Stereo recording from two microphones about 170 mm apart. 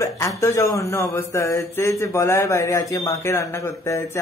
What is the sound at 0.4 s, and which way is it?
Speech, 15° left (ahead or behind).